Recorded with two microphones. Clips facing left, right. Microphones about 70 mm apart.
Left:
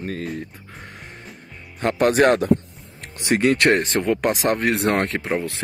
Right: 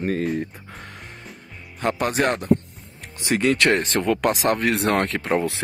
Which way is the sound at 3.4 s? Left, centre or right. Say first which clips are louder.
Left 2 dB; left.